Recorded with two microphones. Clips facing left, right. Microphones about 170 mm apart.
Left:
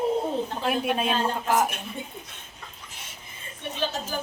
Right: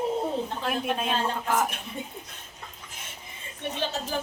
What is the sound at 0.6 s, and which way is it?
Speech, 10° left (ahead or behind).